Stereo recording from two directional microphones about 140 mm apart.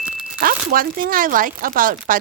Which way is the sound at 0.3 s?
90° right.